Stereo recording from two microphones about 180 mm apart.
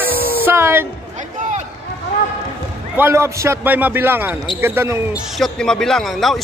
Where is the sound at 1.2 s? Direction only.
40° right (ahead or behind).